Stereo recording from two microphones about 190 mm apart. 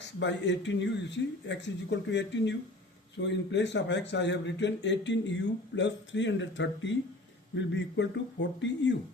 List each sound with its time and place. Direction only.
0.2 s speech: 70° left (ahead or behind)